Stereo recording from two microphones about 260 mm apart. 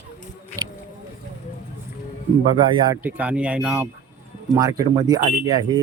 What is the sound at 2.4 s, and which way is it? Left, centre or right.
Speech, centre.